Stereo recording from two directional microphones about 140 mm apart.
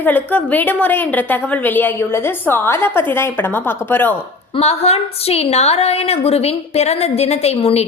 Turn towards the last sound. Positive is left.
turn(degrees=50)  # may be behind; listen again after turning